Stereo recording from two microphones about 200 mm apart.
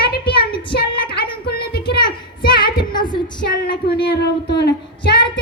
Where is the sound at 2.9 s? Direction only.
20° left (ahead or behind).